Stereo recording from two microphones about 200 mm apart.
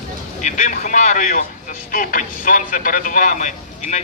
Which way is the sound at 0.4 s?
35° left (ahead or behind).